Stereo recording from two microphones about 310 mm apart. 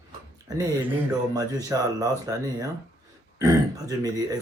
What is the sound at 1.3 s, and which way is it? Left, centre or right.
Speech, centre.